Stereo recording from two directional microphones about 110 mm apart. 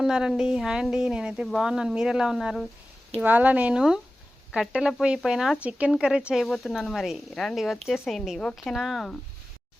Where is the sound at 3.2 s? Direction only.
15° right (ahead or behind).